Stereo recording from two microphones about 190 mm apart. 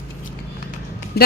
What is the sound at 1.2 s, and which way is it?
Speech, 55° left (ahead or behind).